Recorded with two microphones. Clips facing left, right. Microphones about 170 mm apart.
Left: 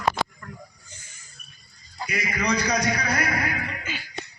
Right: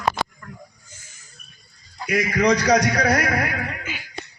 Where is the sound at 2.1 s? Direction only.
80° right.